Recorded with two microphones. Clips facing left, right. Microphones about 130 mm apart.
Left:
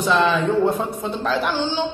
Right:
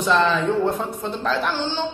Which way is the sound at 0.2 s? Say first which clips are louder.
Left 2 dB; 15° left (ahead or behind).